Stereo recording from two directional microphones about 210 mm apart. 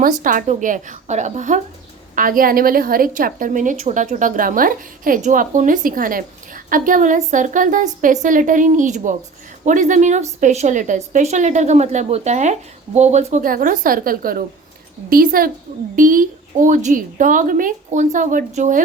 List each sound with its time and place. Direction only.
0.0 s a woman's voice: 40° right (ahead or behind)